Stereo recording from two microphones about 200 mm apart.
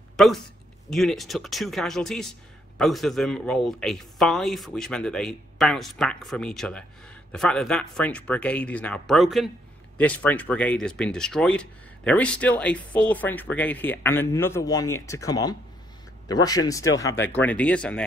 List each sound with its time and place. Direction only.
0.2 s speech: centre (ahead or behind)